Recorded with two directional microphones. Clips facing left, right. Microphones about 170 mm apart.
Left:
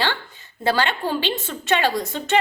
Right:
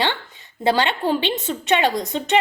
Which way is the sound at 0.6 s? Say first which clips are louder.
Right 2 dB; 20° right (ahead or behind).